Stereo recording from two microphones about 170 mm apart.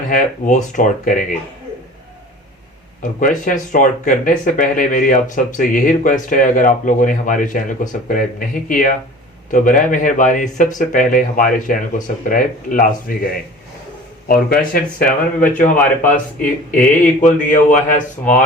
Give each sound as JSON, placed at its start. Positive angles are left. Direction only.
{"t": 0.1, "sound": "speech", "side_deg": 50}
{"t": 3.0, "sound": "speech", "side_deg": 50}